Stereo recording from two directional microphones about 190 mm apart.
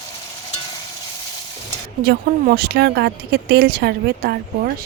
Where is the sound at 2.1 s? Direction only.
55° right (ahead or behind).